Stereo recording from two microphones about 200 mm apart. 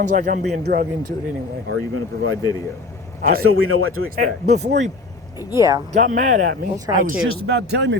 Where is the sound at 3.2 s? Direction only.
50° right (ahead or behind).